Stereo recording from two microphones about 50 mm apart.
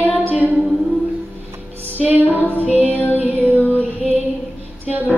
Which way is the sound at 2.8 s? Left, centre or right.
Left.